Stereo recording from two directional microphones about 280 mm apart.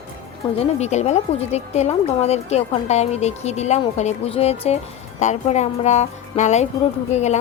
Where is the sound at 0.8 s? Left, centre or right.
Left.